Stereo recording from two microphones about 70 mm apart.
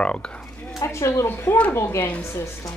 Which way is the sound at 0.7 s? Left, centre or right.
Left.